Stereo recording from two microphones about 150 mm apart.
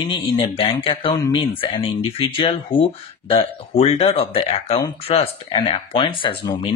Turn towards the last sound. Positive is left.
turn(degrees=35)  # may be behind; listen again after turning